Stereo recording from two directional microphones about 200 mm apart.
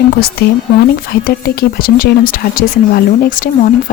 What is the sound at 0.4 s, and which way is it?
Speech, 50° left (ahead or behind).